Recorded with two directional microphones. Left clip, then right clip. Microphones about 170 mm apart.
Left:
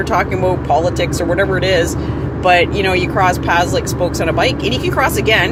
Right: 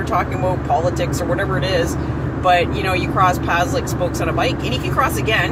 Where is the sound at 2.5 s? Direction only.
45° left (ahead or behind).